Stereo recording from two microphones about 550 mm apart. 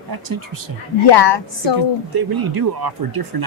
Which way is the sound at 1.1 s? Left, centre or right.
Left.